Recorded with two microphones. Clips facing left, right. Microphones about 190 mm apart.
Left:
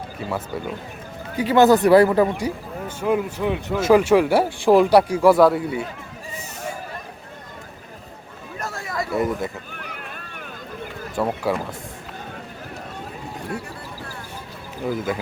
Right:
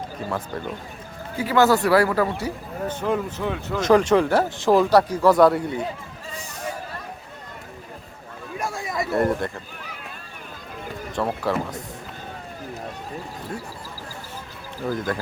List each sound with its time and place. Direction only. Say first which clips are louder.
0.3 s speech: left 2 dB; 5° left (ahead or behind)
1.4 s speech: left 4 dB; 20° left (ahead or behind)
2.9 s speech: left 4 dB; 10° left (ahead or behind)
8.5 s a sound: right 1 dB; 10° right (ahead or behind)
9.1 s speech: right 1 dB; centre (ahead or behind)
11.2 s speech: left 2 dB; 5° left (ahead or behind)
14.8 s speech: left 1 dB; 5° left (ahead or behind)